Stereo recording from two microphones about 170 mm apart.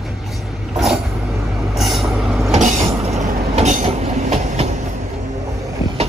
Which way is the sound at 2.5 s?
45° right (ahead or behind).